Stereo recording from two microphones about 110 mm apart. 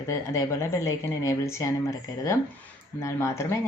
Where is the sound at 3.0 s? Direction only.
25° left (ahead or behind).